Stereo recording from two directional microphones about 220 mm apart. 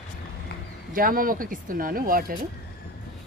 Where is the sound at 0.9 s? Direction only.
40° right (ahead or behind).